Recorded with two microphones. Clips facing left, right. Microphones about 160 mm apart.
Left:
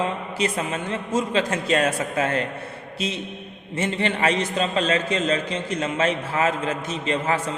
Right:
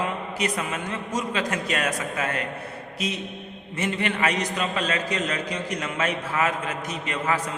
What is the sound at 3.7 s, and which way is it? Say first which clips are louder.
A man's voice: left 2 dB; 30° left (ahead or behind).